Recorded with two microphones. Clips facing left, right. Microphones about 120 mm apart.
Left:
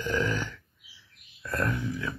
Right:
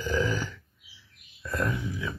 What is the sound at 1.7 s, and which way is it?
Speech, 20° right (ahead or behind).